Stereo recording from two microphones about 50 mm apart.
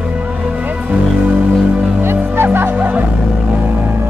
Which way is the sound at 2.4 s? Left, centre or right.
Right.